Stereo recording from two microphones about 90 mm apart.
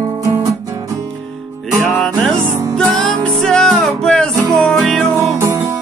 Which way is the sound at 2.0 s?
10° left (ahead or behind).